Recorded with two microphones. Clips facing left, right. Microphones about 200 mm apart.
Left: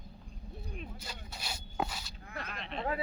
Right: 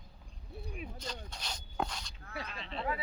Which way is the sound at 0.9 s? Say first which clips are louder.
Right 3 dB; 5° left (ahead or behind).